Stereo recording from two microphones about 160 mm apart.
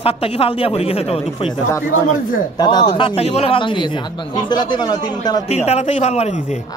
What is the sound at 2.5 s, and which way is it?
Speech, 25° left (ahead or behind).